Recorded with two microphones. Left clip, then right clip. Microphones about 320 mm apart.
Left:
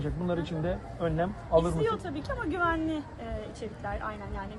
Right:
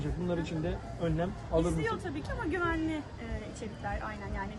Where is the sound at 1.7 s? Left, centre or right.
Centre.